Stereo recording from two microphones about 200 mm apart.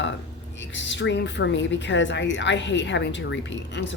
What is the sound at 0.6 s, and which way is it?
A woman's voice, 65° left (ahead or behind).